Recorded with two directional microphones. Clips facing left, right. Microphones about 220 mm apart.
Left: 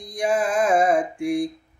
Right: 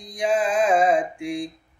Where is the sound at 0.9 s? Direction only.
45° left (ahead or behind).